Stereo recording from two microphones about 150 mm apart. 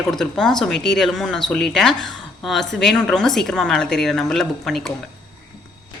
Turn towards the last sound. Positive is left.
turn(degrees=0)  # may be behind; listen again after turning